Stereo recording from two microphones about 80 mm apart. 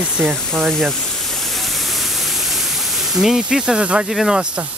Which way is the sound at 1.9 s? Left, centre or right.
Centre.